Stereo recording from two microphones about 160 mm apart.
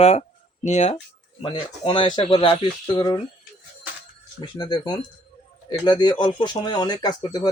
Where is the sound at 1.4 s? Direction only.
30° left (ahead or behind).